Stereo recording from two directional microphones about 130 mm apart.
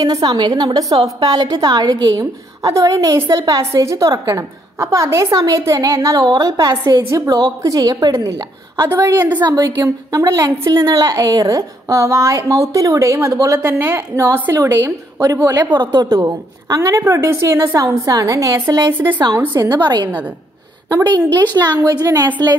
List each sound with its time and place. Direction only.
0.0 s a woman's voice: 30° right (ahead or behind)
15.7 s a woman's voice: 35° right (ahead or behind)
16.1 s a woman's voice: 25° right (ahead or behind)
20.1 s a woman's voice: 10° right (ahead or behind)
20.9 s a woman's voice: 30° right (ahead or behind)